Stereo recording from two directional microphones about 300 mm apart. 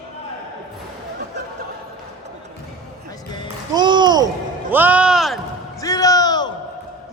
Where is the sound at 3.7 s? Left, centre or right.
Centre.